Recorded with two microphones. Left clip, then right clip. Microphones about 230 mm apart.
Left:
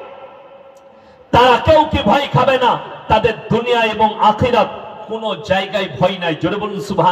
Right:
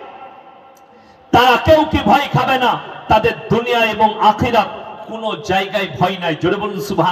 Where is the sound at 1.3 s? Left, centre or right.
Left.